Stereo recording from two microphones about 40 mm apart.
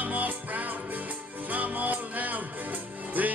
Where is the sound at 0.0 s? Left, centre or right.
Right.